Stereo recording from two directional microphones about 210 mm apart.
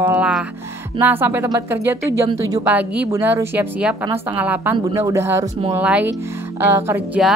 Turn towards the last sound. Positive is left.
turn(degrees=-10)  # may be behind; listen again after turning